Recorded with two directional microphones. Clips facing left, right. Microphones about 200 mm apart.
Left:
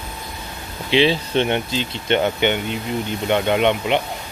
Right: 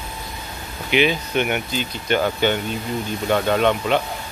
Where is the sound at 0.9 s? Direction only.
30° left (ahead or behind).